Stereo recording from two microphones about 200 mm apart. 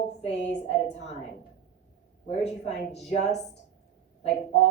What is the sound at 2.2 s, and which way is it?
A woman's voice, 30° left (ahead or behind).